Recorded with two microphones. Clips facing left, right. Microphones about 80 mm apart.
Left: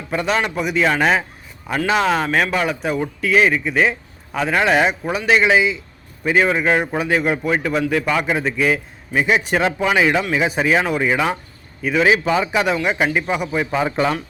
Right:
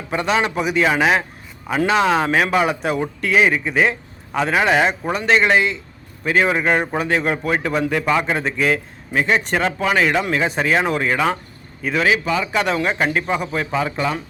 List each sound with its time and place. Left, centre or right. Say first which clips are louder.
0.1 s speech: right 1 dB; centre
12.0 s speech: left 2 dB; left
12.5 s speech: left 1 dB; centre